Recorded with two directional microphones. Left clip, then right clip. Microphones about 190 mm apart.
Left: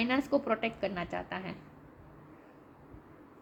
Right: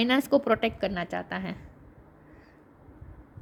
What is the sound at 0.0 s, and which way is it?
A woman's voice, 55° right (ahead or behind).